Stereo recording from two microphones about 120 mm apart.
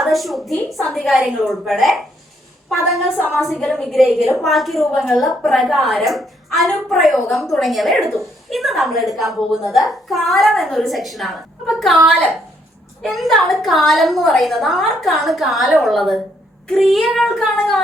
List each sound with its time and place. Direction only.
0.0 s a woman's voice: centre (ahead or behind)
3.2 s a woman's voice: 15° left (ahead or behind)
3.4 s a woman's voice: centre (ahead or behind)